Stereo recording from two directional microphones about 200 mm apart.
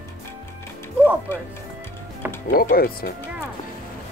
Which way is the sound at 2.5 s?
45° left (ahead or behind).